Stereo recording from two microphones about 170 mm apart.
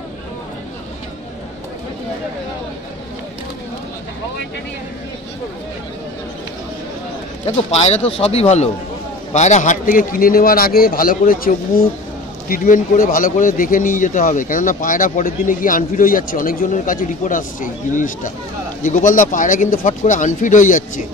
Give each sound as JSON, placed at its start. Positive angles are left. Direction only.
{"t": 7.4, "sound": "a man's voice", "side_deg": 40}